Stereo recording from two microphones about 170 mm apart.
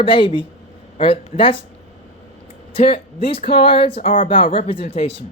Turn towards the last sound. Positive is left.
turn(degrees=35)  # may be behind; listen again after turning